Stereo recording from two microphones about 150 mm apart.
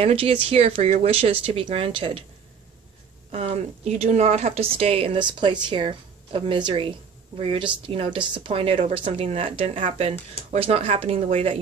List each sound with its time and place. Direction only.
0.0 s speech: 35° right (ahead or behind)
3.3 s a woman's voice: 45° right (ahead or behind)